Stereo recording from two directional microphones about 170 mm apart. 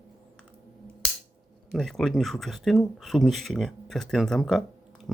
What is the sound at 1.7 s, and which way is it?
Speech, centre (ahead or behind).